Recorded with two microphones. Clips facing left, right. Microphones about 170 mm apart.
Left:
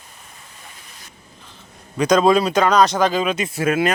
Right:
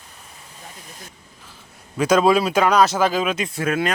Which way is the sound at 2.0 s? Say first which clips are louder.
Left 1 dB; 5° right (ahead or behind).